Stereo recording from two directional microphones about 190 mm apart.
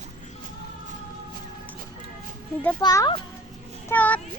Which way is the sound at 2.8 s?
20° left (ahead or behind).